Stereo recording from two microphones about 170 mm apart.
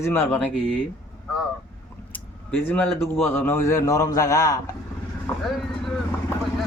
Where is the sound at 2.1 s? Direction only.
10° left (ahead or behind).